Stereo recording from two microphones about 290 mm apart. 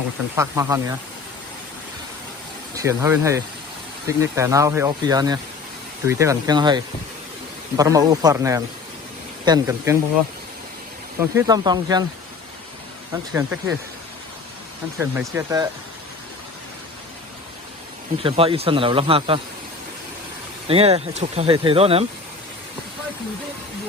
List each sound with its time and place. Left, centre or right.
0.3 s speech: centre
2.7 s speech: centre
11.2 s speech: centre
13.3 s speech: centre
14.9 s speech: centre
18.2 s speech: centre
20.7 s speech: centre